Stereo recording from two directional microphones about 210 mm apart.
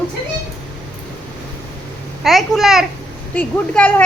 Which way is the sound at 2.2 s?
Centre (ahead or behind).